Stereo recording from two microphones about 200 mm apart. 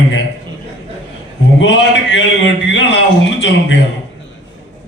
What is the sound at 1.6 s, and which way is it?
A man's voice, 65° left (ahead or behind).